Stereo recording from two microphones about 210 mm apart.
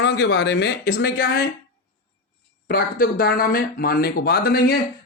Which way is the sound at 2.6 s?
45° left (ahead or behind).